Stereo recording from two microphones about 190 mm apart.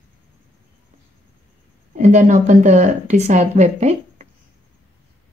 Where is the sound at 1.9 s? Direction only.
40° right (ahead or behind).